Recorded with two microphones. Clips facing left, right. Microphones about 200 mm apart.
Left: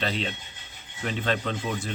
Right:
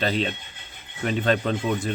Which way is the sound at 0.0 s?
40° right (ahead or behind).